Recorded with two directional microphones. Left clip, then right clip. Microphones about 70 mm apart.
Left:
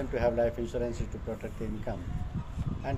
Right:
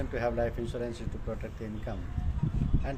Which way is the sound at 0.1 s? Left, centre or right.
Centre.